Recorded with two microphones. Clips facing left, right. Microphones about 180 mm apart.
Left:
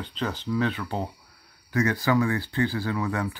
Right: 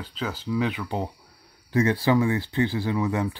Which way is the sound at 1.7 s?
25° right (ahead or behind).